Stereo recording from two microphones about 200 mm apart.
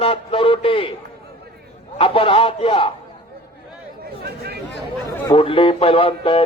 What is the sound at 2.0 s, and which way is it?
Speech, 25° left (ahead or behind).